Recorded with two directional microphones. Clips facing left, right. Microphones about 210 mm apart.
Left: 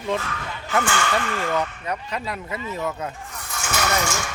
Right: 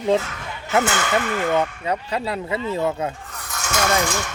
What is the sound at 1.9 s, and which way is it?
Speech, 30° right (ahead or behind).